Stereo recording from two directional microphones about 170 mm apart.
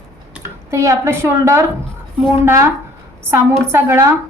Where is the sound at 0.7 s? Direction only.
15° right (ahead or behind).